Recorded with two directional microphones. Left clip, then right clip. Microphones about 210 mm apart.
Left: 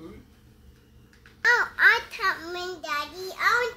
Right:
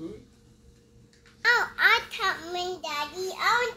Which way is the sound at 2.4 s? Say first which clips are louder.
Right 2 dB; 20° left (ahead or behind).